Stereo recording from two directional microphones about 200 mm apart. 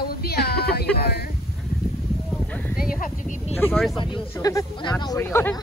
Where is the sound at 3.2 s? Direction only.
40° left (ahead or behind).